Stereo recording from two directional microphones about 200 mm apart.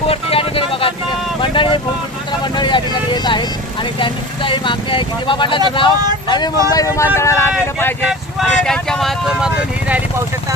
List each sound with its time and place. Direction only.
0.1 s vehicle: 30° left (ahead or behind)
4.0 s speech: 25° left (ahead or behind)
8.4 s speech: 5° left (ahead or behind)